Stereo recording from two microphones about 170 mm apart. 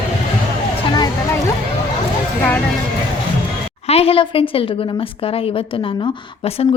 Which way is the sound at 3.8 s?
35° left (ahead or behind).